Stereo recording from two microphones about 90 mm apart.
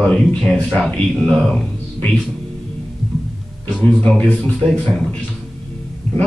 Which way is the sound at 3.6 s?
15° left (ahead or behind).